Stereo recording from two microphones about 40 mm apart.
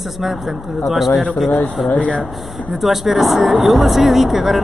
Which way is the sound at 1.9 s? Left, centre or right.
Left.